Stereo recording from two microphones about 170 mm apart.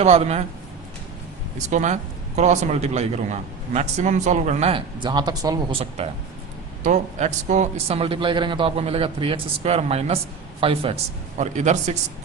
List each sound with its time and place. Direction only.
0.0 s a man's voice: 40° right (ahead or behind)
1.7 s a man's voice: 45° right (ahead or behind); by 5.5 s 20° right (ahead or behind)
6.0 s a man's voice: 40° right (ahead or behind)
11.3 s a man's voice: 45° right (ahead or behind)